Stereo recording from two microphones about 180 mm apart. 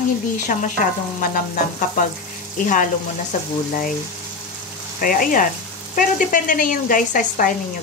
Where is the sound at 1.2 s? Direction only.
50° left (ahead or behind).